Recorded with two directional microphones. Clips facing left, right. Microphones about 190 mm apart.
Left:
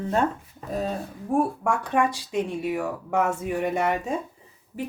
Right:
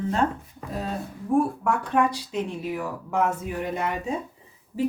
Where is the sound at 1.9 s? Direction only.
75° left (ahead or behind).